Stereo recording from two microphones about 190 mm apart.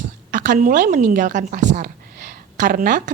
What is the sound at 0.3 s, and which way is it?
A woman's voice, 45° right (ahead or behind).